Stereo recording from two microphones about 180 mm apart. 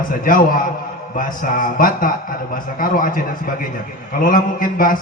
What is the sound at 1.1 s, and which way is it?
A man's voice, 50° left (ahead or behind).